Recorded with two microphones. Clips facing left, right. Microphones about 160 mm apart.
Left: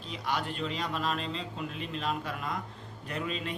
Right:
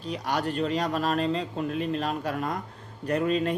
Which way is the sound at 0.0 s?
45° right (ahead or behind).